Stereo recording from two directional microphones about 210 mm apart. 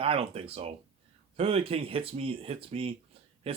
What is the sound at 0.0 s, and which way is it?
A man's voice, 25° right (ahead or behind).